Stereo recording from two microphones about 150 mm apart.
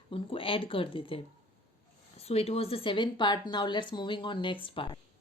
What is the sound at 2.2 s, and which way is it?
A woman's voice, 45° left (ahead or behind).